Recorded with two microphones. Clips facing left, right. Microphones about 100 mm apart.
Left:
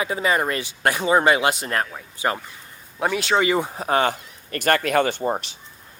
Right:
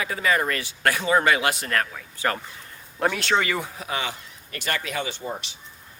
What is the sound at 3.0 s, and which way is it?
Speech, 5° left (ahead or behind).